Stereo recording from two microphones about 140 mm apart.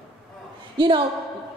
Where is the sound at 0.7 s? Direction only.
35° right (ahead or behind).